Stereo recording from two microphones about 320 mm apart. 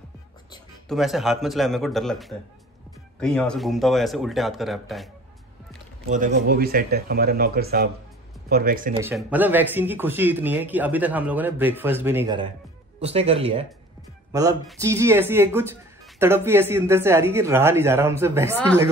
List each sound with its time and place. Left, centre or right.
0.8 s speech: centre
6.0 s speech: right
9.1 s speech: centre